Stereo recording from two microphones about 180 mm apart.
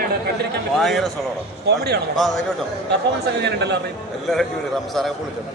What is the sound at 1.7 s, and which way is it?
Speech, 65° right (ahead or behind).